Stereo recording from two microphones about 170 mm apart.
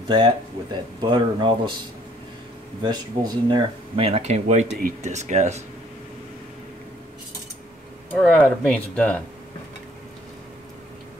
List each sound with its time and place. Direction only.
0.1 s speech: 25° right (ahead or behind)
2.8 s speech: 25° right (ahead or behind); by 5.6 s 45° right (ahead or behind)
8.1 s speech: 5° left (ahead or behind)